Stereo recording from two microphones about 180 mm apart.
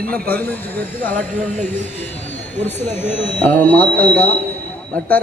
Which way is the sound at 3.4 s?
10° left (ahead or behind).